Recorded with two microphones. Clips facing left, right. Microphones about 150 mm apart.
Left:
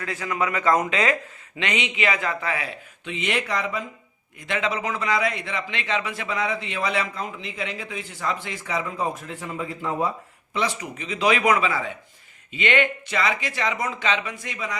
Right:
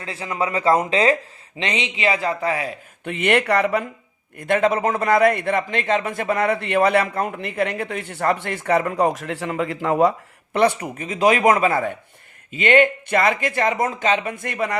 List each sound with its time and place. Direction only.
0.0 s speech: 30° right (ahead or behind)
3.0 s a man's voice: 60° right (ahead or behind)
4.4 s a man's voice: 50° right (ahead or behind)